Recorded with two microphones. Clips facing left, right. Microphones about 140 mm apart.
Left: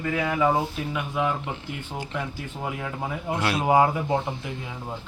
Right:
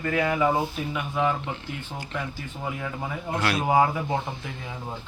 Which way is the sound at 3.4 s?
20° left (ahead or behind).